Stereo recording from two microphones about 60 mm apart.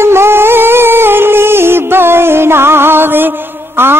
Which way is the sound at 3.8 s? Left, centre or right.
Right.